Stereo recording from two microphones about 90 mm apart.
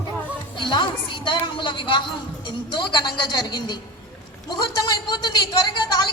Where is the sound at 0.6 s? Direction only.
65° left (ahead or behind).